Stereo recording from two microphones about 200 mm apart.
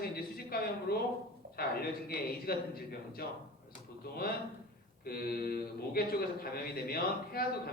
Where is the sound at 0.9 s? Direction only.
50° left (ahead or behind).